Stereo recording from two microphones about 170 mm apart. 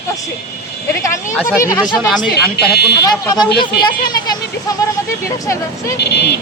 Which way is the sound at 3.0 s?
25° left (ahead or behind).